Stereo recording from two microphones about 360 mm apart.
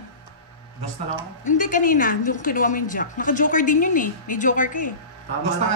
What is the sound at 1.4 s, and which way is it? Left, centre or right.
A woman's voice, left.